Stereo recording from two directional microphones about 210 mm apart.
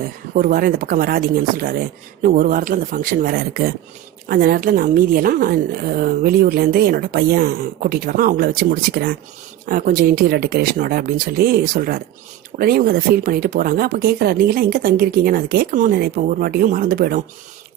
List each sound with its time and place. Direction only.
0.3 s a woman's voice: 45° right (ahead or behind)